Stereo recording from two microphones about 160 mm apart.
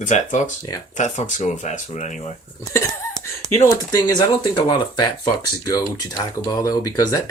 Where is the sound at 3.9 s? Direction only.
25° left (ahead or behind).